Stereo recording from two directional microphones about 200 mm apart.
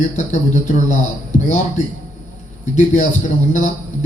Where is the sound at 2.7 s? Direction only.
40° left (ahead or behind).